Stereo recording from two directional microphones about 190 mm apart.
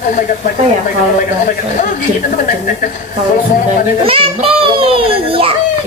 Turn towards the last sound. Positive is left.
turn(degrees=-30)  # may be behind; listen again after turning